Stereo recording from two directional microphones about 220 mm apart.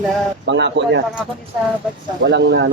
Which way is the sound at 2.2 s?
60° right (ahead or behind).